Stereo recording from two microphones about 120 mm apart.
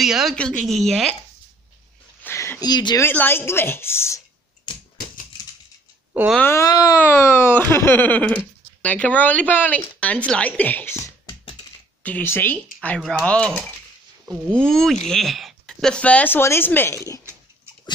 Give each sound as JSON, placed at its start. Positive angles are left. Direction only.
{"t": 0.0, "sound": "a woman's voice", "side_deg": -5}
{"t": 2.2, "sound": "a sound", "side_deg": 20}
{"t": 2.6, "sound": "speech", "side_deg": 35}
{"t": 3.0, "sound": "speech", "side_deg": 20}
{"t": 6.4, "sound": "speech", "side_deg": 20}
{"t": 12.5, "sound": "speech", "side_deg": 5}
{"t": 14.5, "sound": "a woman's voice", "side_deg": 5}